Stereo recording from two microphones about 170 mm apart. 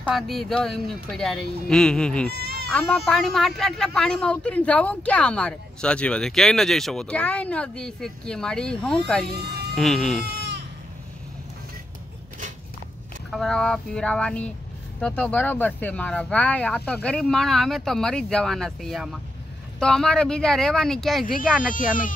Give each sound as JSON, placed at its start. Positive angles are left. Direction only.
{"t": 0.0, "sound": "speech", "side_deg": 0}
{"t": 2.4, "sound": "baby cry", "side_deg": -70}
{"t": 2.7, "sound": "speech", "side_deg": 5}
{"t": 9.3, "sound": "a sound", "side_deg": -70}
{"t": 9.8, "sound": "speech", "side_deg": 0}
{"t": 10.2, "sound": "goat", "side_deg": -75}
{"t": 13.3, "sound": "speech", "side_deg": 0}